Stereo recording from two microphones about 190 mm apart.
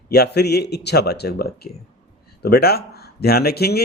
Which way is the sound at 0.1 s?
60° left (ahead or behind).